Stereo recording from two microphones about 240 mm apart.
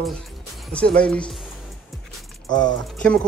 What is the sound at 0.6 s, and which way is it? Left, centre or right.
Speech, centre.